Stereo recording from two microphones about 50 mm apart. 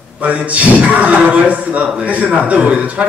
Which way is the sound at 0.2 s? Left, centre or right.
Right.